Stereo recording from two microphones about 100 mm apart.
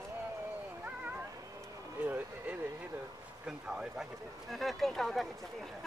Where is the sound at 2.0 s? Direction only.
15° right (ahead or behind).